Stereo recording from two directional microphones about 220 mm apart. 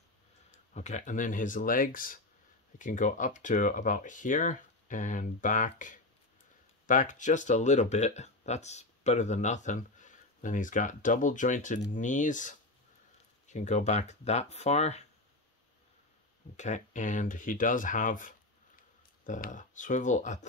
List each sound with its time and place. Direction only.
0.7 s speech: 30° left (ahead or behind)
16.5 s speech: 35° left (ahead or behind)